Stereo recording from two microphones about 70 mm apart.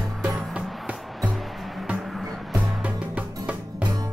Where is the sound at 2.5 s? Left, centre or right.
Right.